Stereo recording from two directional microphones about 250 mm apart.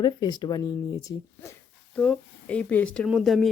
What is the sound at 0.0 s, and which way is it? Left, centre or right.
Speech, centre.